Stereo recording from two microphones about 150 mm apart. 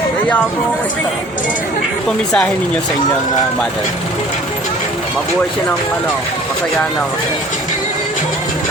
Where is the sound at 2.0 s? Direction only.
5° left (ahead or behind).